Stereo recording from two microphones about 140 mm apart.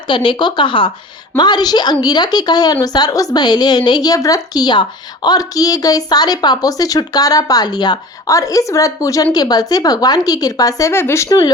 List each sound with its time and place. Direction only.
0.1 s a woman's voice: 35° left (ahead or behind); by 11.3 s 20° left (ahead or behind)